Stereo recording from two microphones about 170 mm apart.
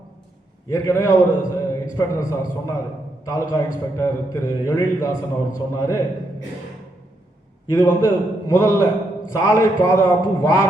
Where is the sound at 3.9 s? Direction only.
15° left (ahead or behind).